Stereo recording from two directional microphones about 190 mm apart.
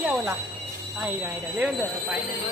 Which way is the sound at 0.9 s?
5° right (ahead or behind).